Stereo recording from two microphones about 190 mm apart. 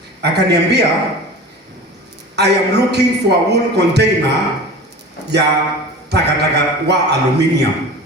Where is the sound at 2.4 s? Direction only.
60° right (ahead or behind).